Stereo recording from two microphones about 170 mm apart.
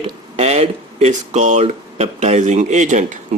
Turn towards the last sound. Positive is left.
turn(degrees=-45)  # may be behind; listen again after turning